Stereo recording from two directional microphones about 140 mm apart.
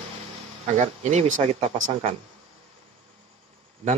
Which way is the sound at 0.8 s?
60° right (ahead or behind).